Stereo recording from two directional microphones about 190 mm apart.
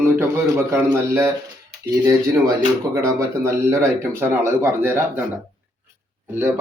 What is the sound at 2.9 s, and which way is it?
Speech, 15° right (ahead or behind).